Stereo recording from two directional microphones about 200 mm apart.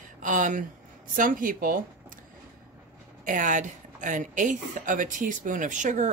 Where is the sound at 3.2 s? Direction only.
40° right (ahead or behind).